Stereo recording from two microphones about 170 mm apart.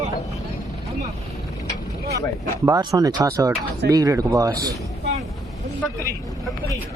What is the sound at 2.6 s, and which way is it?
Speech, 20° right (ahead or behind).